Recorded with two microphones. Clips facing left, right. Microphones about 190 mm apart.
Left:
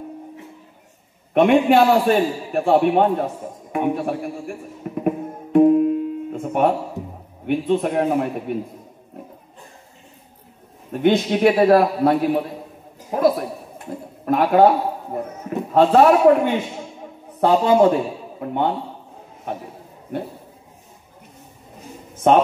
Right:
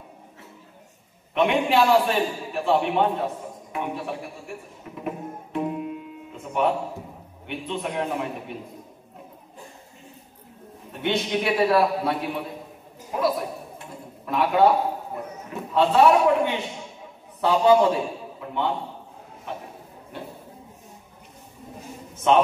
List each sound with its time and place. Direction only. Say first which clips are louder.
1.3 s a man's voice: left 7 dB; 50° left (ahead or behind)
4.9 s music: left 9 dB; 50° left (ahead or behind)
7.4 s a man's voice: left 11 dB; 50° left (ahead or behind)
11.0 s a man's voice: left 8 dB; 45° left (ahead or behind)
14.2 s a man's voice: left 5 dB; 50° left (ahead or behind)
15.7 s a man's voice: left 4 dB; 50° left (ahead or behind)
22.3 s a man's voice: left 4 dB; 45° left (ahead or behind)